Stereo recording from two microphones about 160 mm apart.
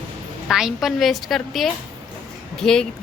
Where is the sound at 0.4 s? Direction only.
Centre (ahead or behind).